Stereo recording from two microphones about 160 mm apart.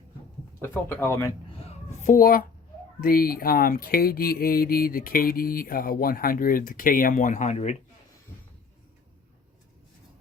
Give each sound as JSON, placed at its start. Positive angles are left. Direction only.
{"t": 0.6, "sound": "speech", "side_deg": 10}
{"t": 1.5, "sound": "a sound", "side_deg": 40}
{"t": 2.0, "sound": "mantra", "side_deg": 60}